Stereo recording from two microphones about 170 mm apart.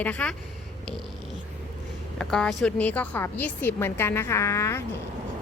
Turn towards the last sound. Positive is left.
turn(degrees=15)  # may be behind; listen again after turning